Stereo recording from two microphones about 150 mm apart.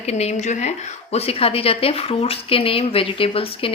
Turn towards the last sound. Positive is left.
turn(degrees=35)  # may be behind; listen again after turning